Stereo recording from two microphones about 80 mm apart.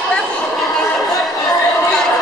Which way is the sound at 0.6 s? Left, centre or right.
Centre.